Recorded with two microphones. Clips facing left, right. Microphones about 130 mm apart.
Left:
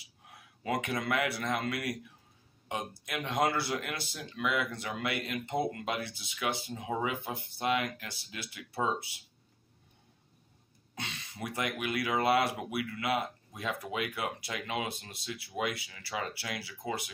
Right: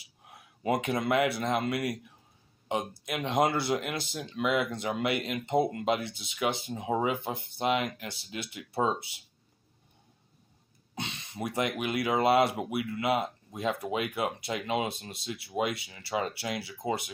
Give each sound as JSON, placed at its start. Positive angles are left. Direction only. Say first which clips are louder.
{"t": 0.7, "sound": "speech", "louder": "right 4 dB", "side_deg": -25}
{"t": 11.0, "sound": "speech", "louder": "right 4 dB", "side_deg": -25}